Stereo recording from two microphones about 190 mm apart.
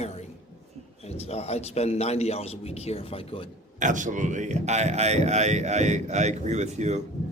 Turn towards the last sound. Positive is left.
turn(degrees=-35)  # may be behind; listen again after turning